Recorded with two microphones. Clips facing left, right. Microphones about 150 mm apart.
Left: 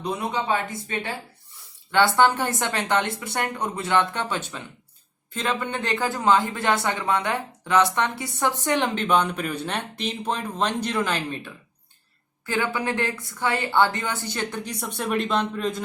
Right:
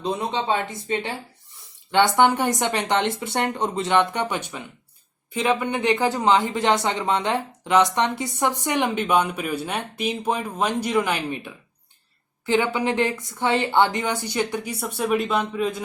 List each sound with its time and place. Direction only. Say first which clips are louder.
0.0 s speech: right 2 dB; 25° right (ahead or behind); by 15.8 s 5° right (ahead or behind)